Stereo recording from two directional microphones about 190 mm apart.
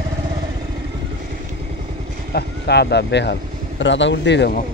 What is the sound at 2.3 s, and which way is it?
Speech, 60° left (ahead or behind).